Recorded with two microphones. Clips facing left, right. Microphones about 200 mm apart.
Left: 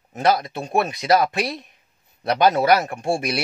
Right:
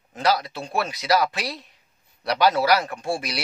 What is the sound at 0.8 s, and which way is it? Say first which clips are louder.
Speech: left 5 dB; 20° left (ahead or behind).